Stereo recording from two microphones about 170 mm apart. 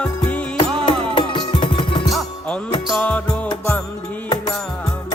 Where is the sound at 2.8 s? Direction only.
5° left (ahead or behind).